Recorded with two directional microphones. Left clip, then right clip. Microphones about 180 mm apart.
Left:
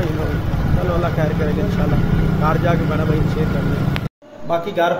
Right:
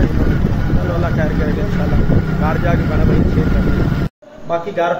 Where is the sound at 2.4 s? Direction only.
15° left (ahead or behind).